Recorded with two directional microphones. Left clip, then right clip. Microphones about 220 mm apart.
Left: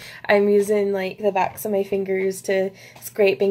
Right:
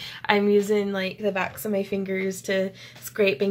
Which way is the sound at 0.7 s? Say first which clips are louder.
Left 4 dB; 5° right (ahead or behind).